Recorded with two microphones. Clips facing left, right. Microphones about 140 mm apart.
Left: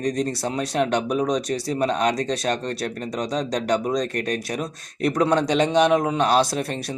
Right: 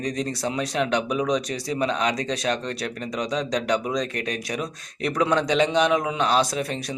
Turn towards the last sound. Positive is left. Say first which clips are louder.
# left 2 dB
turn(degrees=45)  # may be behind; listen again after turning